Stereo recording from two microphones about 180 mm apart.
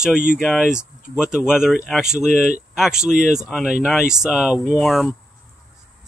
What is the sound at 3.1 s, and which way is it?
Speech, 45° right (ahead or behind).